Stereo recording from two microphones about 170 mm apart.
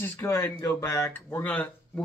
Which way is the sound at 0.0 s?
15° left (ahead or behind).